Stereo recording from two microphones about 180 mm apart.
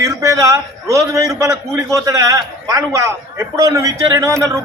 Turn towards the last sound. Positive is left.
turn(degrees=-20)  # may be behind; listen again after turning